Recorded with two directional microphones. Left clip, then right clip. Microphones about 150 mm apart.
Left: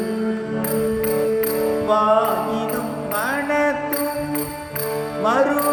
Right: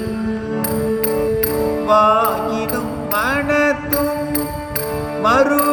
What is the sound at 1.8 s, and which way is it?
Music, 40° right (ahead or behind).